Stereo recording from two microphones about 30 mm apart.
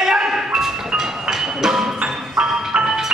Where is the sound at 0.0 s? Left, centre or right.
Centre.